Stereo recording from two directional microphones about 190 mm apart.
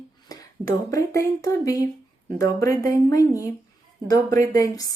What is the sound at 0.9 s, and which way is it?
Speech, 15° left (ahead or behind).